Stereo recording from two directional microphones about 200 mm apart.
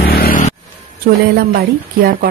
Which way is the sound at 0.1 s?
45° left (ahead or behind).